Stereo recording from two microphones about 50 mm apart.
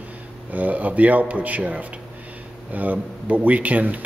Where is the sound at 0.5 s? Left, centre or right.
Right.